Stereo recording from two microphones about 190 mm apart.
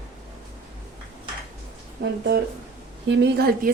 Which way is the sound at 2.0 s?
55° right (ahead or behind).